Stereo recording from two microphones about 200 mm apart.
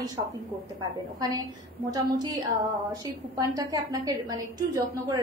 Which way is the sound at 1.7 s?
20° right (ahead or behind).